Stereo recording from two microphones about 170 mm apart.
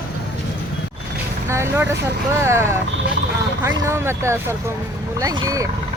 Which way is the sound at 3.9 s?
15° right (ahead or behind).